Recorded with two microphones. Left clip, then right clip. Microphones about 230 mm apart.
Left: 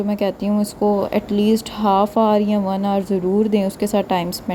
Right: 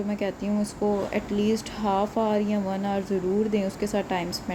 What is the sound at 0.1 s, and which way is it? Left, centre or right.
Speech, left.